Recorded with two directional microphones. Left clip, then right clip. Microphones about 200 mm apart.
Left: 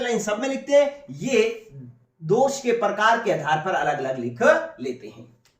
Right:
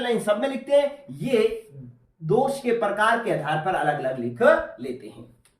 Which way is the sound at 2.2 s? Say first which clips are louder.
Left 2 dB; 25° right (ahead or behind).